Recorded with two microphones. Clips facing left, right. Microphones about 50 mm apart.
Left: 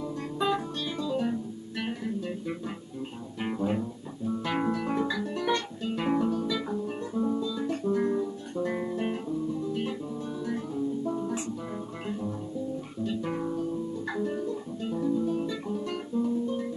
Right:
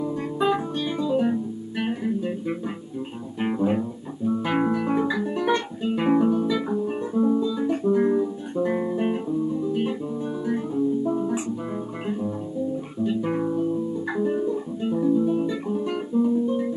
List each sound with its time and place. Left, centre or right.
0.0 s guitar: centre
3.3 s music: right
13.0 s guitar: centre